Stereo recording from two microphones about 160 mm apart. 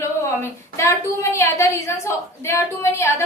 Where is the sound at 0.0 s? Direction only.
20° left (ahead or behind).